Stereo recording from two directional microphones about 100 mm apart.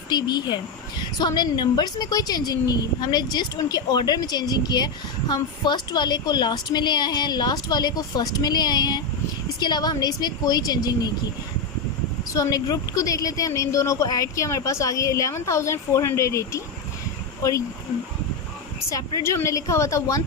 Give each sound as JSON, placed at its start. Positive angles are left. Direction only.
{"t": 0.1, "sound": "a woman's voice", "side_deg": 45}
{"t": 12.3, "sound": "a woman's voice", "side_deg": 35}
{"t": 18.9, "sound": "a woman's voice", "side_deg": 35}